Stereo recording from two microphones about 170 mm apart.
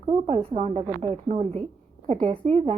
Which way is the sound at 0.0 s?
40° right (ahead or behind).